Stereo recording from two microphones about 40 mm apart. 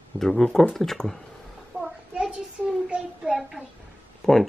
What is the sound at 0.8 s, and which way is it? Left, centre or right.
Speech, centre.